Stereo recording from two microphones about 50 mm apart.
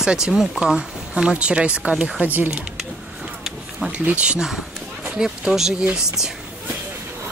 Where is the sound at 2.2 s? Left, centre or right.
Right.